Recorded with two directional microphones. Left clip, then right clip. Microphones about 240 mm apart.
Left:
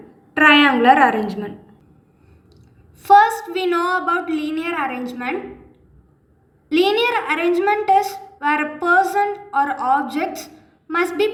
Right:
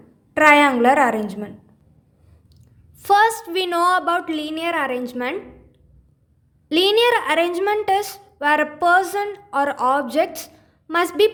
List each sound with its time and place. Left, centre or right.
0.3 s a woman's voice: right
3.0 s a child's voice: right
6.7 s a woman's voice: right